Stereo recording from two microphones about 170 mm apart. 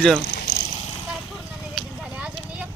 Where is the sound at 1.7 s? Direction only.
5° right (ahead or behind).